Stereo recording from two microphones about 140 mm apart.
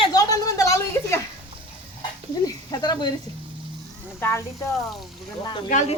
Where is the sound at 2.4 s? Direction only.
30° left (ahead or behind).